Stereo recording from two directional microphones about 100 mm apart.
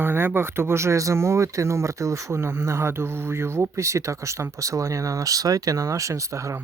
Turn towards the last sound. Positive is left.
turn(degrees=-30)  # may be behind; listen again after turning